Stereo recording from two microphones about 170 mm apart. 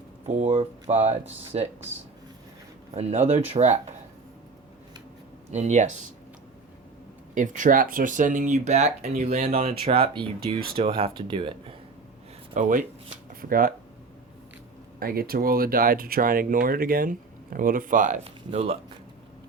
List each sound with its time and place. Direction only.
0.3 s speech: 40° right (ahead or behind)
2.9 s speech: 40° right (ahead or behind)
5.5 s speech: 40° right (ahead or behind)
7.3 s speech: 50° right (ahead or behind); by 11.5 s 30° right (ahead or behind)
12.5 s speech: 50° right (ahead or behind)
14.9 s speech: 60° right (ahead or behind); by 18.8 s 35° right (ahead or behind)